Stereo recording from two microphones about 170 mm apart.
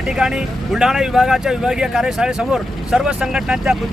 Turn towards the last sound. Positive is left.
turn(degrees=-5)  # may be behind; listen again after turning